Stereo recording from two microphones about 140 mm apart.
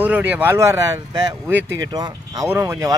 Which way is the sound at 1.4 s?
15° right (ahead or behind).